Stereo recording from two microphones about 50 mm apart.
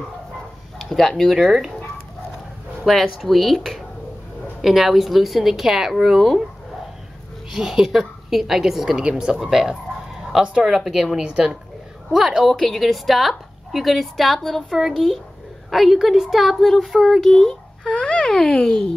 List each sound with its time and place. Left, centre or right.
0.8 s speech: centre
1.3 s a woman's voice: centre
2.8 s a woman's voice: centre
7.5 s a woman's voice: centre
12.4 s a woman's voice: centre
16.5 s a woman's voice: centre
17.9 s speech: left